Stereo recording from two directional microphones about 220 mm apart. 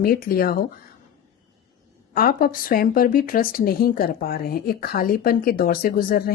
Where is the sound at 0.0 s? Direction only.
40° left (ahead or behind).